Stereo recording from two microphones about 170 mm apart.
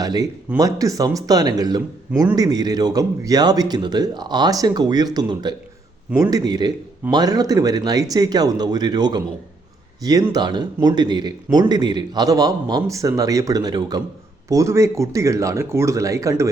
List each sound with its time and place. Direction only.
0.0 s a man's voice: 20° right (ahead or behind)